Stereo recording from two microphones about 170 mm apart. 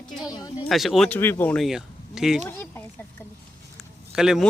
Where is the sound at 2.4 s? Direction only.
15° left (ahead or behind).